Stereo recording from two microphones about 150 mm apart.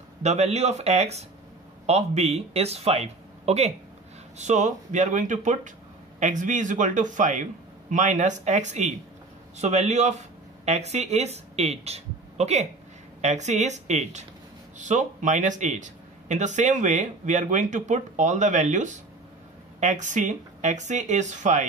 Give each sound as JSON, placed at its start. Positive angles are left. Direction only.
{"t": 0.2, "sound": "speech", "side_deg": -45}